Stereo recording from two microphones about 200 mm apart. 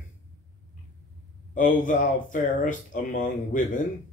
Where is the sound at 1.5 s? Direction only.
40° left (ahead or behind).